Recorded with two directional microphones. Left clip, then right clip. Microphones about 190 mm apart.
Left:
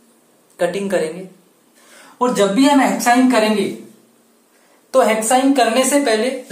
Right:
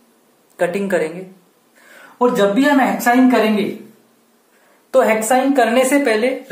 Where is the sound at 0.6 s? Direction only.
30° right (ahead or behind).